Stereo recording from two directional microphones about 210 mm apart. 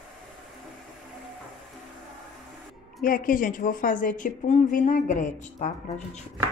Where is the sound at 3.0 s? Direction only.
40° left (ahead or behind).